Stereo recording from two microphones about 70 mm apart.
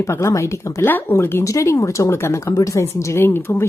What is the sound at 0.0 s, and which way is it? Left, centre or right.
Speech, left.